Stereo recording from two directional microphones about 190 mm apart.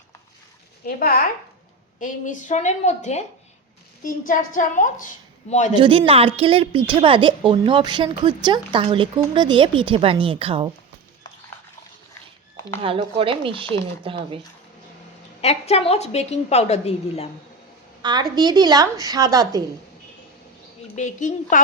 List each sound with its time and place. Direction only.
0.9 s a woman's voice: 50° left (ahead or behind)
4.3 s a woman's voice: 45° left (ahead or behind)
5.7 s a woman's voice: 25° right (ahead or behind)
12.8 s a woman's voice: 30° right (ahead or behind)
15.4 s a woman's voice: 35° left (ahead or behind)
18.0 s a woman's voice: 20° right (ahead or behind)
20.9 s a woman's voice: 40° left (ahead or behind)